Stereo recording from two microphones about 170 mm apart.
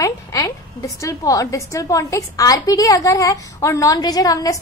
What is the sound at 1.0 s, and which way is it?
A woman's voice, 20° left (ahead or behind).